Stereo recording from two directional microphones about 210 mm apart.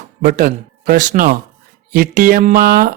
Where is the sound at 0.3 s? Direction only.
45° right (ahead or behind).